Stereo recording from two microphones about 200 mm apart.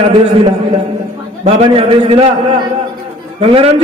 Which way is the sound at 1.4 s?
30° right (ahead or behind).